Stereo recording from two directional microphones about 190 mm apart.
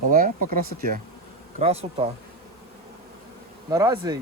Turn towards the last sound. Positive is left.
turn(degrees=-20)  # may be behind; listen again after turning